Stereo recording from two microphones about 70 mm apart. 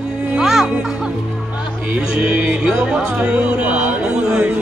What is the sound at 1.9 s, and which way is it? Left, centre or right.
Speech, centre.